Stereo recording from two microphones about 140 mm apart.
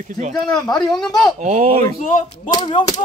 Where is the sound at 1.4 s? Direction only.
55° right (ahead or behind).